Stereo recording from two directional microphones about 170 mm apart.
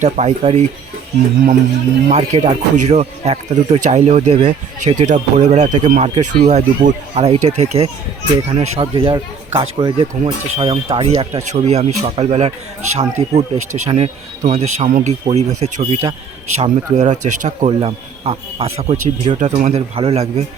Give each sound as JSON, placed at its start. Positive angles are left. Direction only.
{"t": 0.0, "sound": "speech", "side_deg": -40}
{"t": 2.0, "sound": "speech", "side_deg": -40}